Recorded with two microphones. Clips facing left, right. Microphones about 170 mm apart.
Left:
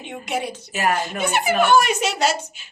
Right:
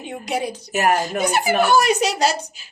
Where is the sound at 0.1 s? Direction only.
35° right (ahead or behind).